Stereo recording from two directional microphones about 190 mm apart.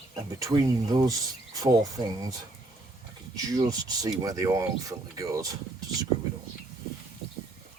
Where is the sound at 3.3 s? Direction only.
20° right (ahead or behind).